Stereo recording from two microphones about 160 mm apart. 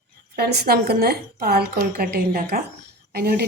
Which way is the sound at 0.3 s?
85° right.